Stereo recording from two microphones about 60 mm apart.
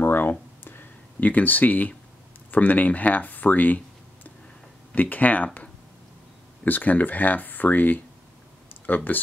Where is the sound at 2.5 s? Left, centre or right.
Left.